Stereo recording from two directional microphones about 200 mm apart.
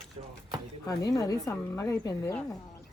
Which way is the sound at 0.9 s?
15° left (ahead or behind).